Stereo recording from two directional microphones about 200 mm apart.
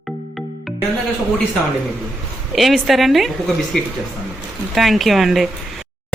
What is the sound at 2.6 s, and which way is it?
A woman's voice, centre (ahead or behind).